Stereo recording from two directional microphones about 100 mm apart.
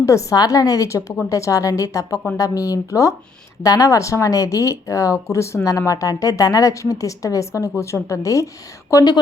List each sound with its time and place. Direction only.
0.0 s a woman's voice: 30° left (ahead or behind)